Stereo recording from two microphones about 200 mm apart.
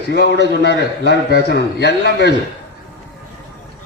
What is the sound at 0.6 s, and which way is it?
A man's voice, 60° left (ahead or behind).